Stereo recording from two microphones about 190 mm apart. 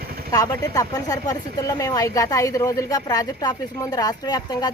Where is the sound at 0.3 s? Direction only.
20° left (ahead or behind).